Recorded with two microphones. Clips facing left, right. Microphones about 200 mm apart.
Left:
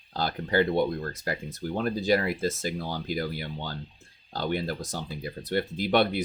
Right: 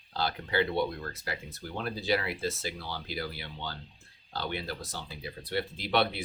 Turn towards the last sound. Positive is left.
turn(degrees=50)  # may be behind; listen again after turning